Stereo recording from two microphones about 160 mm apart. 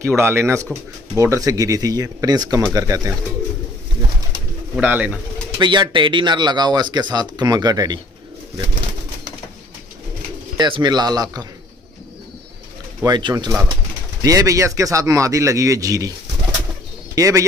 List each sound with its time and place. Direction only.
0.0 s speech: 15° right (ahead or behind)
4.7 s speech: 10° right (ahead or behind)
5.6 s speech: 30° right (ahead or behind)
10.6 s speech: 25° right (ahead or behind)
13.0 s speech: 25° right (ahead or behind)
17.1 s speech: 20° right (ahead or behind)